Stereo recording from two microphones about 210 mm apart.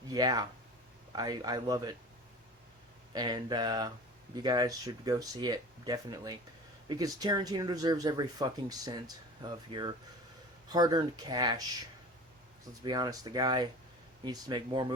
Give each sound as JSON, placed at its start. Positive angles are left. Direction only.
{"t": 0.1, "sound": "speech", "side_deg": -15}
{"t": 3.1, "sound": "speech", "side_deg": -20}
{"t": 12.8, "sound": "speech", "side_deg": -20}